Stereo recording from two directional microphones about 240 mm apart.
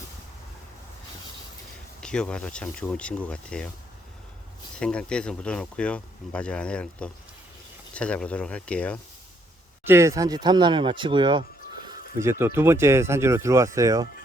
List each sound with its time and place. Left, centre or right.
2.0 s speech: centre
4.8 s speech: centre
9.8 s speech: centre